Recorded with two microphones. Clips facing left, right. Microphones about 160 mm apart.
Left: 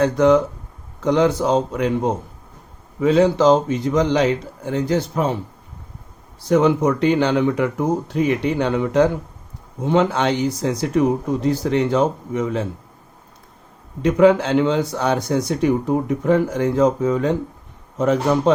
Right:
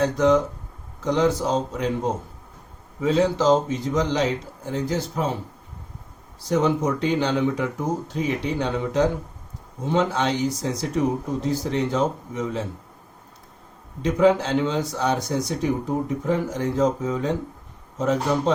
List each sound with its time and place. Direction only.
0.0 s speech: 60° left (ahead or behind)
3.0 s speech: 65° left (ahead or behind)
6.5 s speech: 65° left (ahead or behind)
14.0 s speech: 65° left (ahead or behind)